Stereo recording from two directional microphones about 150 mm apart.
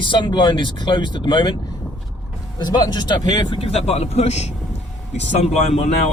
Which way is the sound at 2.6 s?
30° left (ahead or behind).